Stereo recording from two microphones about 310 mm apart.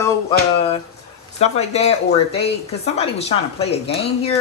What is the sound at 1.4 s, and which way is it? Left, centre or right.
Speech, centre.